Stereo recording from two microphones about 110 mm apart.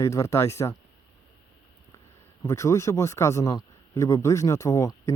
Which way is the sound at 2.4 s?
25° left (ahead or behind).